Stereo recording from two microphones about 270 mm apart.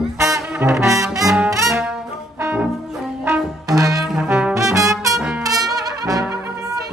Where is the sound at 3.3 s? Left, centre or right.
Centre.